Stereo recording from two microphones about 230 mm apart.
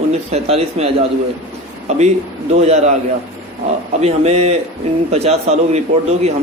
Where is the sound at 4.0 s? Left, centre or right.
Right.